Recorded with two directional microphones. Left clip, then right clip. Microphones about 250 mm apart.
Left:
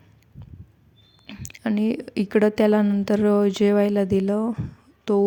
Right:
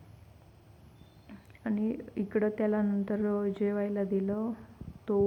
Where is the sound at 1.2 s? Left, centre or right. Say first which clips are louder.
Left 10 dB; left.